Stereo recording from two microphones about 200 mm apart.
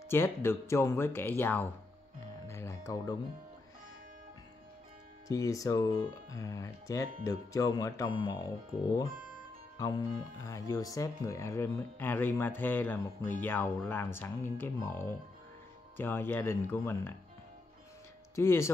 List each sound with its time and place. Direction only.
0.1 s speech: 10° left (ahead or behind)
2.4 s music: 15° left (ahead or behind)
5.3 s speech: 15° left (ahead or behind)
18.3 s speech: 15° left (ahead or behind)